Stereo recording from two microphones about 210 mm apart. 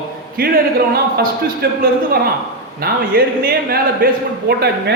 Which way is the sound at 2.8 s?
45° right (ahead or behind).